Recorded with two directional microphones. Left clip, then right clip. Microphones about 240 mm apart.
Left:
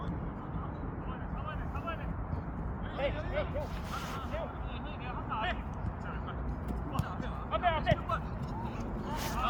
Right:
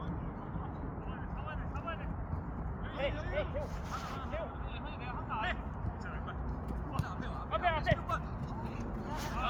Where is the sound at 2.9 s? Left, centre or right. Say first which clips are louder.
Left 2 dB; centre.